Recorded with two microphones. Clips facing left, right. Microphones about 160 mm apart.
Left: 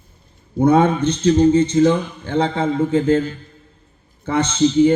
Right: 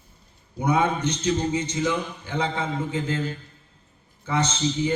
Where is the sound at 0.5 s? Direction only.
55° left (ahead or behind).